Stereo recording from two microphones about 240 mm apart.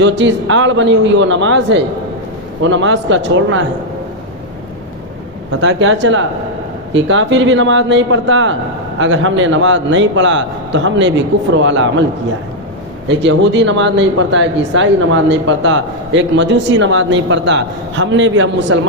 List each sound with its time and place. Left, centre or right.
0.0 s speech: right
5.5 s speech: right
13.1 s speech: right